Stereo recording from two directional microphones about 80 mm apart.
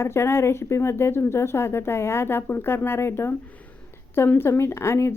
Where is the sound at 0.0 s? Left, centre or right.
Left.